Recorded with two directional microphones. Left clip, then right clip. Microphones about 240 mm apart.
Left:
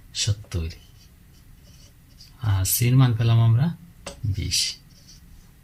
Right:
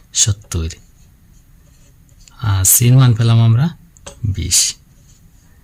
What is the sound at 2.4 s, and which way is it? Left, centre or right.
Speech, right.